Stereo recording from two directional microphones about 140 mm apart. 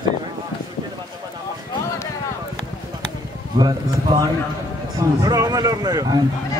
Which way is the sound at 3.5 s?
30° right (ahead or behind).